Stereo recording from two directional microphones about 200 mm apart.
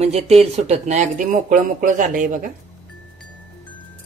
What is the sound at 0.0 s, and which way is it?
Speech, 30° right (ahead or behind).